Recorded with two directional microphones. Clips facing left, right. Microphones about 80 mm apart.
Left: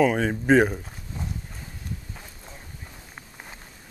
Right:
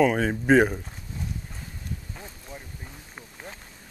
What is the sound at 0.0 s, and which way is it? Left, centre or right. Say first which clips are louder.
Speech: even; centre.